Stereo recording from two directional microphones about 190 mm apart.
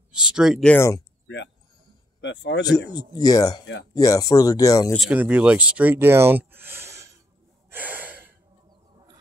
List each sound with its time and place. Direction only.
0.1 s speech: 5° right (ahead or behind); by 1.0 s 15° left (ahead or behind)
1.2 s a sound: 70° left (ahead or behind)
2.2 s a man's voice: 70° left (ahead or behind)
2.6 s speech: 20° left (ahead or behind)
4.9 s speech: 5° right (ahead or behind)
7.7 s gasp: 10° right (ahead or behind)